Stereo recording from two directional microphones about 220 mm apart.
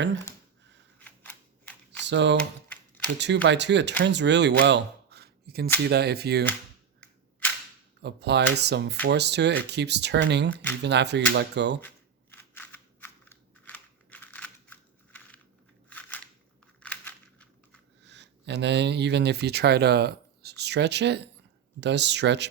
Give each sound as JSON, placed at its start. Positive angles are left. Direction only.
{"t": 0.9, "sound": "a sound", "side_deg": 5}
{"t": 2.0, "sound": "speech", "side_deg": -55}
{"t": 3.4, "sound": "speech", "side_deg": -55}
{"t": 7.0, "sound": "cap gun", "side_deg": 5}
{"t": 8.0, "sound": "speech", "side_deg": -50}
{"t": 10.5, "sound": "speech", "side_deg": 5}
{"t": 10.8, "sound": "speech", "side_deg": -50}
{"t": 12.3, "sound": "scissors", "side_deg": 10}
{"t": 16.8, "sound": "a sound", "side_deg": 5}
{"t": 18.0, "sound": "speech", "side_deg": -50}